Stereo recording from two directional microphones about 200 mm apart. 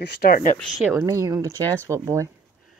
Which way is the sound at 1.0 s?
15° right (ahead or behind).